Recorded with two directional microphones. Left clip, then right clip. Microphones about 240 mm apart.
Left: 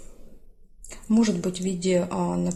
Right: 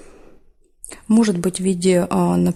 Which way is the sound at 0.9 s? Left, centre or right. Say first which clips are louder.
Right 6 dB; right.